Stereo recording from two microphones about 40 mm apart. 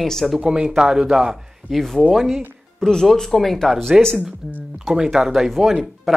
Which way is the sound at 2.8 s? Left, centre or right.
Centre.